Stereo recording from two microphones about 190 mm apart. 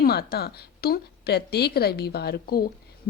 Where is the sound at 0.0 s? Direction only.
55° left (ahead or behind).